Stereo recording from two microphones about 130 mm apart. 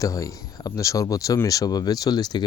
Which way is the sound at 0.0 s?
25° left (ahead or behind).